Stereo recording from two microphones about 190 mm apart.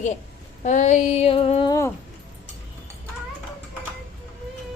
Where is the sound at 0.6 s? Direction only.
40° left (ahead or behind).